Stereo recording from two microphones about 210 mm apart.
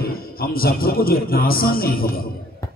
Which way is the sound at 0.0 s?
45° left (ahead or behind).